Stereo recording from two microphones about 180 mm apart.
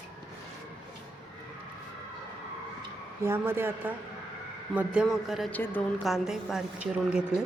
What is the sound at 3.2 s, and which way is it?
A man's voice, 15° right (ahead or behind).